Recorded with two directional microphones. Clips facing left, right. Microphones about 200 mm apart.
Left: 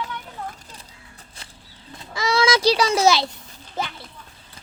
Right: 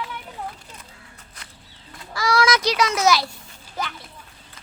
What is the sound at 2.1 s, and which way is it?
Speech, 25° left (ahead or behind).